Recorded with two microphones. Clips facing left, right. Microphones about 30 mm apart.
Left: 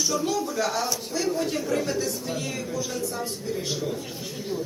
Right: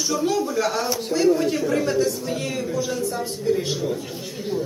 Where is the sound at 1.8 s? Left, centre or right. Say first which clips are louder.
Right 6 dB; centre.